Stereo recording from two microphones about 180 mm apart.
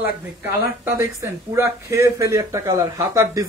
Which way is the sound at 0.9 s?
15° right (ahead or behind).